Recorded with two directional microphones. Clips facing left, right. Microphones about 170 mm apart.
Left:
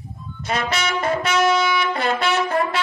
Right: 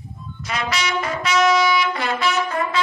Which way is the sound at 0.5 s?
50° left (ahead or behind).